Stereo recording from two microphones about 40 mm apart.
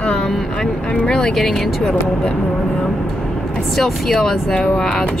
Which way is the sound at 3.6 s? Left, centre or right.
Centre.